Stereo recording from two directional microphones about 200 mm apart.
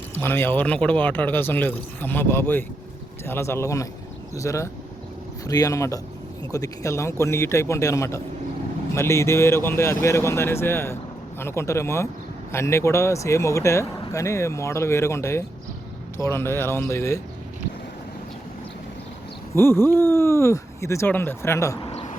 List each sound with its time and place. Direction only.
0.1 s a man's voice: 10° left (ahead or behind)
19.5 s a man's voice: 10° left (ahead or behind)